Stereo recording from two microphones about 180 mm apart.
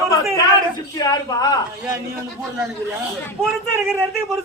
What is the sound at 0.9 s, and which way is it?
Speech, 20° left (ahead or behind).